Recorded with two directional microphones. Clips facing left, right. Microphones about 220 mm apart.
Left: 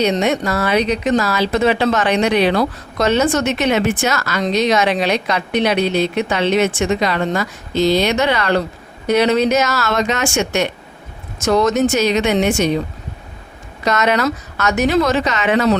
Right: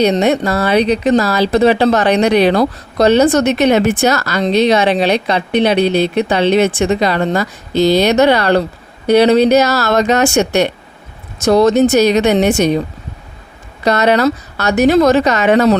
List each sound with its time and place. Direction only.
0.0 s a woman's voice: 35° right (ahead or behind)
13.8 s a woman's voice: 35° right (ahead or behind)